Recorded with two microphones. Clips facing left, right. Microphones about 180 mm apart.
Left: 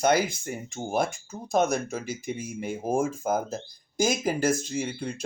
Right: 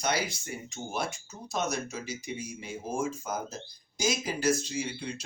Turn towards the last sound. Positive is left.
turn(degrees=50)  # may be behind; listen again after turning